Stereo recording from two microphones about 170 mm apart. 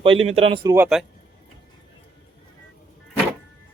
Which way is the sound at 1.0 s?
Centre (ahead or behind).